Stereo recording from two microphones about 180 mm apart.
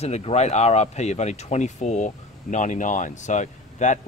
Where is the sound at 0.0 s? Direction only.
35° left (ahead or behind).